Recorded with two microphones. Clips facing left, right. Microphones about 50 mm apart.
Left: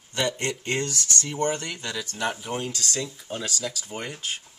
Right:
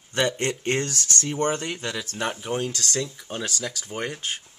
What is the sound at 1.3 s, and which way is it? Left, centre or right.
Speech, right.